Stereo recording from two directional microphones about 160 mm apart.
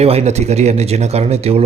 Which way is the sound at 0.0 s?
40° right (ahead or behind).